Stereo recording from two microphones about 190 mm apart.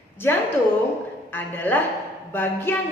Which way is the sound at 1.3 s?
10° left (ahead or behind).